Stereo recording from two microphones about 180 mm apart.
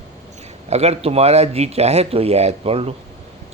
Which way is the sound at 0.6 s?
35° right (ahead or behind).